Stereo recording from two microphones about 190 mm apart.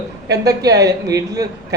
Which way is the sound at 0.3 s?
20° right (ahead or behind).